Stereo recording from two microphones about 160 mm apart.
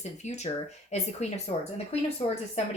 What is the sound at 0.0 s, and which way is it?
A woman's voice, 45° left (ahead or behind).